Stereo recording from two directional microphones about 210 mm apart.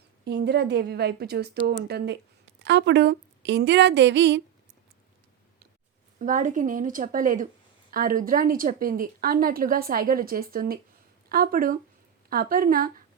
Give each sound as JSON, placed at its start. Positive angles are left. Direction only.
{"t": 0.3, "sound": "a woman's voice", "side_deg": -50}
{"t": 6.1, "sound": "a woman's voice", "side_deg": -40}